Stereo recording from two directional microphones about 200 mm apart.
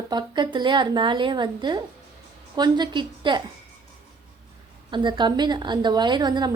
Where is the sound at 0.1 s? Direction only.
20° right (ahead or behind).